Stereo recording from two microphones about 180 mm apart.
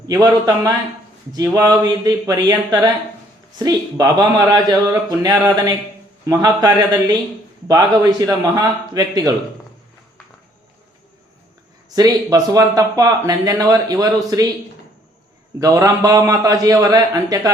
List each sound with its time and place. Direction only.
0.1 s speech: 20° right (ahead or behind)
11.9 s speech: 20° right (ahead or behind)
15.6 s speech: 20° right (ahead or behind)